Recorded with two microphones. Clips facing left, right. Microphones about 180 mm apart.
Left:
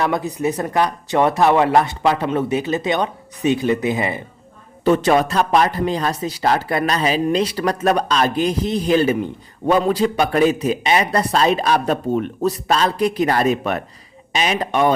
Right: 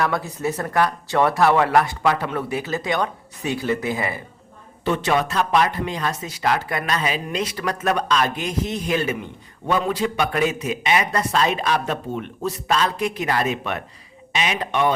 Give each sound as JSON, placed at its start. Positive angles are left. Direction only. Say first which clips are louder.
{"t": 0.0, "sound": "speech", "louder": "left 3 dB", "side_deg": 20}
{"t": 4.9, "sound": "speech", "louder": "left 6 dB", "side_deg": 40}